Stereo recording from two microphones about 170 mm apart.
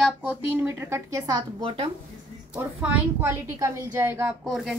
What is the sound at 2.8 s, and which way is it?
Speech, 10° right (ahead or behind).